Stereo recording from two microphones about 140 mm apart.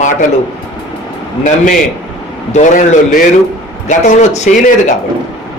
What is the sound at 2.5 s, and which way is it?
Speech, 60° left (ahead or behind).